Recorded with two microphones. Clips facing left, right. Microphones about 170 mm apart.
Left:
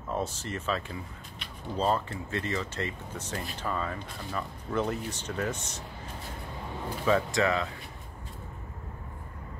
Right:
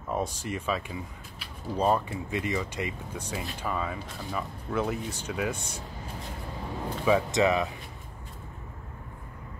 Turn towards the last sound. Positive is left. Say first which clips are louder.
# right 3 dB
turn(degrees=-20)  # may be behind; listen again after turning